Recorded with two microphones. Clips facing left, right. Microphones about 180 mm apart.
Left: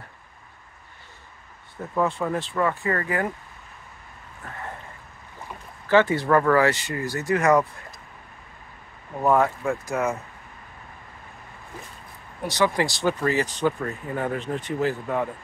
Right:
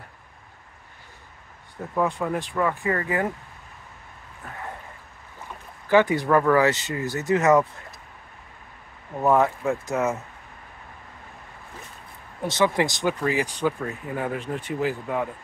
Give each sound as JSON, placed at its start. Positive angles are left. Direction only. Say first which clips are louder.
{"t": 2.0, "sound": "speech", "louder": "even", "side_deg": -15}
{"t": 5.9, "sound": "speech", "louder": "even", "side_deg": -15}
{"t": 9.4, "sound": "speech", "louder": "right 1 dB", "side_deg": -20}
{"t": 12.4, "sound": "speech", "louder": "right 1 dB", "side_deg": -20}